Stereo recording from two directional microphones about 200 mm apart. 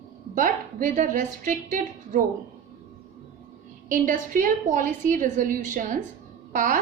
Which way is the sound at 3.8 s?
45° right (ahead or behind).